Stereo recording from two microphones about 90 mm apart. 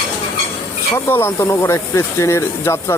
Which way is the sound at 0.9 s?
25° left (ahead or behind).